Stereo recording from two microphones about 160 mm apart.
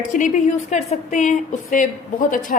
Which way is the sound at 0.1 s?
50° left (ahead or behind).